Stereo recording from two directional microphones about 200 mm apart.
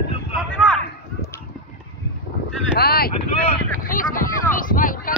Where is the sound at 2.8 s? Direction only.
50° left (ahead or behind).